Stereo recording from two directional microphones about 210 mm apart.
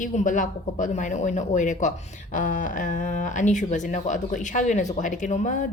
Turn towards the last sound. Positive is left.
turn(degrees=35)  # may be behind; listen again after turning